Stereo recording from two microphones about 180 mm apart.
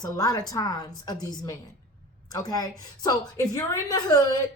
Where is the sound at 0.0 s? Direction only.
20° left (ahead or behind).